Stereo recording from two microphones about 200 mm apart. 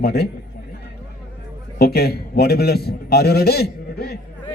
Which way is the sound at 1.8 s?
50° left (ahead or behind).